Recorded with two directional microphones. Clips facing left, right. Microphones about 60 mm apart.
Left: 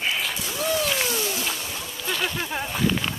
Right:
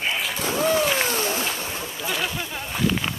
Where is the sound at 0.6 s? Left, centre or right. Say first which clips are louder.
Right 3 dB; right.